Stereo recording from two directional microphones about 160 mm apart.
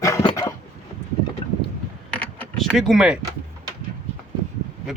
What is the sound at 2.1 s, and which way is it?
Keys jangling, 10° left (ahead or behind).